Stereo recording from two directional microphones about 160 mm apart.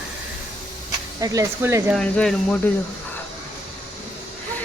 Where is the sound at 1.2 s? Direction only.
20° right (ahead or behind).